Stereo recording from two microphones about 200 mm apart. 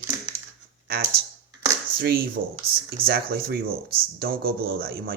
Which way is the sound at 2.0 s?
50° right (ahead or behind).